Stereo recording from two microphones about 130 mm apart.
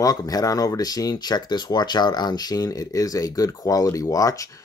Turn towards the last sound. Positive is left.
turn(degrees=25)  # may be behind; listen again after turning